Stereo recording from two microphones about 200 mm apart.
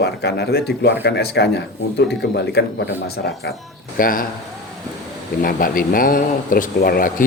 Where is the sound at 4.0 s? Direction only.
45° left (ahead or behind).